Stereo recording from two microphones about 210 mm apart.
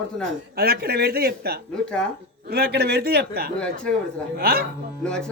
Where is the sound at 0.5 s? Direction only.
45° right (ahead or behind).